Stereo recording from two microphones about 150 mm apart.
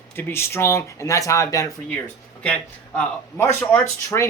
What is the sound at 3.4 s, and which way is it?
Speech, 15° left (ahead or behind).